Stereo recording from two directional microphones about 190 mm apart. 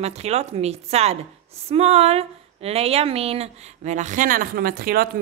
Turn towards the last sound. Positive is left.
turn(degrees=-50)  # may be behind; listen again after turning